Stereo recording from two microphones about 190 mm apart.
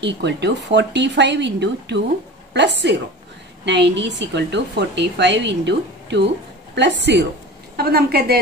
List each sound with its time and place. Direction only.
0.0 s a woman's voice: 65° right (ahead or behind)